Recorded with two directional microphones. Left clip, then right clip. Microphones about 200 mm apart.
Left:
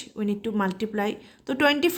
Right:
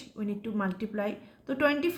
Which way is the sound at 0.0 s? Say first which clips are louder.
Left 7 dB; 40° left (ahead or behind).